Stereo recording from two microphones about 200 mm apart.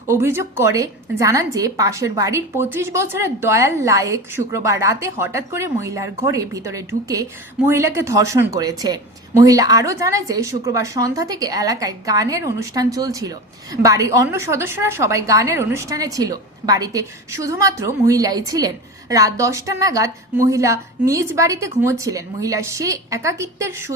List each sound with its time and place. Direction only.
0.1 s a woman's voice: 10° right (ahead or behind)